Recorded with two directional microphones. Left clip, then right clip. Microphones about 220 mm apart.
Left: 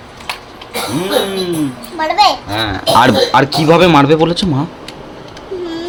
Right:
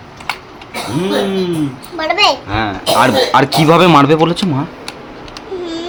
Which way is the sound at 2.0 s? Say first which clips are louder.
Left 1 dB; 25° right (ahead or behind).